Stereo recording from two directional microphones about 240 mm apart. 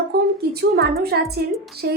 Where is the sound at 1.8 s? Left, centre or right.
Right.